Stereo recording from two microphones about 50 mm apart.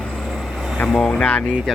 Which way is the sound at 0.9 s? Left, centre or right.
Centre.